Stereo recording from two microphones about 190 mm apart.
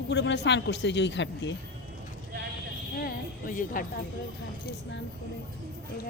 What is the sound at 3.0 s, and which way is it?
Speech, 50° left (ahead or behind).